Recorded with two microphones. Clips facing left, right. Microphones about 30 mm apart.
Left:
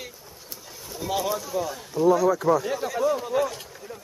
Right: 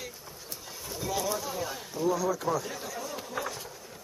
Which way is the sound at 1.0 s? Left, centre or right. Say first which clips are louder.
Left 5 dB; left.